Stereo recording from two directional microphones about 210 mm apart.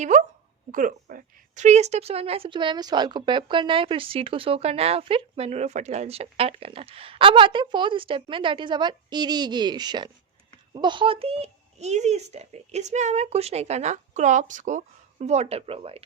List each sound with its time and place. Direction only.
0.0 s speech: 35° right (ahead or behind)